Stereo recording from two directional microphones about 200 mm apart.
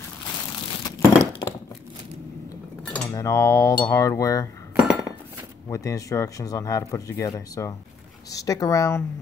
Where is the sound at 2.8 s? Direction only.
5° left (ahead or behind).